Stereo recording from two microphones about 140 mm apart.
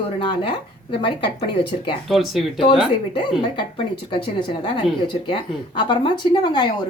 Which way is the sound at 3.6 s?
35° left (ahead or behind).